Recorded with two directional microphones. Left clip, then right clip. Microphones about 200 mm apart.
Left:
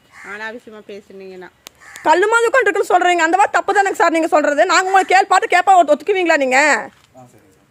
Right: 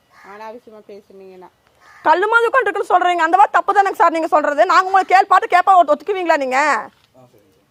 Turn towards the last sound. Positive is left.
turn(degrees=0)  # may be behind; listen again after turning